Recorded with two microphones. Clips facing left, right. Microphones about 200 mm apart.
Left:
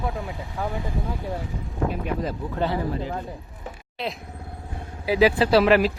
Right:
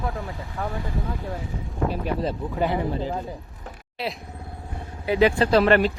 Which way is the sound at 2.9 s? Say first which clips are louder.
Right 1 dB; 30° right (ahead or behind).